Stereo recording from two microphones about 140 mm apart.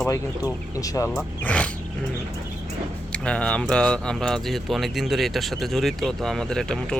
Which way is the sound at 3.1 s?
5° left (ahead or behind).